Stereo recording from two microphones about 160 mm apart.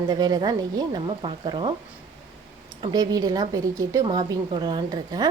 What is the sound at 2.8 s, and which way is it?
A woman's voice, 25° right (ahead or behind).